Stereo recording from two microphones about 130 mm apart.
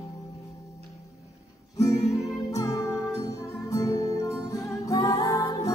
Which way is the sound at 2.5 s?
25° left (ahead or behind).